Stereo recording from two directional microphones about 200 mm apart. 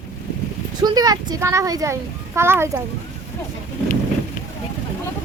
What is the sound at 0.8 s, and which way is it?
A child's voice, 20° right (ahead or behind).